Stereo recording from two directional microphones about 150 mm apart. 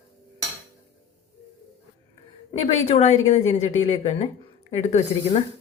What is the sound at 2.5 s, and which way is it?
Speech, 45° left (ahead or behind).